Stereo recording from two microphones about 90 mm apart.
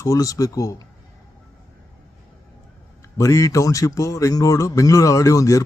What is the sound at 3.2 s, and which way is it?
A man's voice, 35° left (ahead or behind).